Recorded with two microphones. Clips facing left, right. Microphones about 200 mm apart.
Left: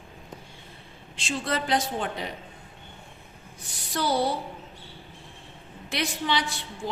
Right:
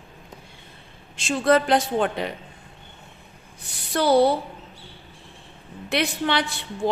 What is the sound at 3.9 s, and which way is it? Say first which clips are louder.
Speech: right 8 dB; 60° right (ahead or behind).